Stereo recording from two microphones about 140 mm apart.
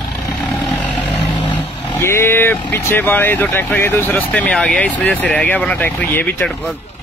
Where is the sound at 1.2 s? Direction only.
35° left (ahead or behind).